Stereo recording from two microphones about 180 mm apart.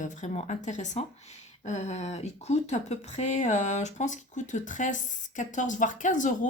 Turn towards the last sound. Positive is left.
turn(degrees=45)  # may be behind; listen again after turning